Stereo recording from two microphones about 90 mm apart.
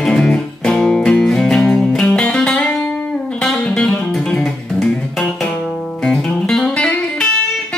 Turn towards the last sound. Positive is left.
turn(degrees=10)  # may be behind; listen again after turning